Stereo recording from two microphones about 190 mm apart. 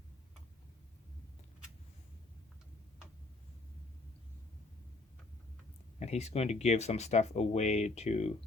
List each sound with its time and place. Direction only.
6.0 s speech: 35° left (ahead or behind)